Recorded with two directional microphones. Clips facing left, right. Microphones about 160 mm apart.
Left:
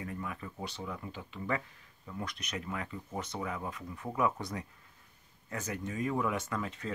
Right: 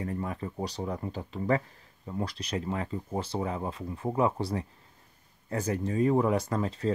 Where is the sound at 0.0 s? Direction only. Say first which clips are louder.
Right 7 dB; 35° right (ahead or behind).